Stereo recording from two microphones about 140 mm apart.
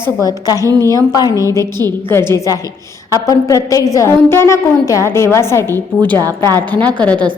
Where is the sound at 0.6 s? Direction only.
25° right (ahead or behind).